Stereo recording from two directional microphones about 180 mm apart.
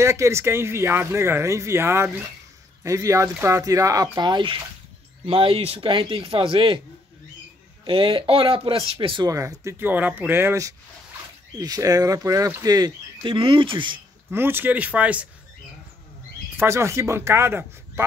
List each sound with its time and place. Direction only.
0.0 s speech: 15° right (ahead or behind)
7.8 s speech: 30° right (ahead or behind)
14.3 s speech: 10° right (ahead or behind)
16.5 s speech: 15° right (ahead or behind)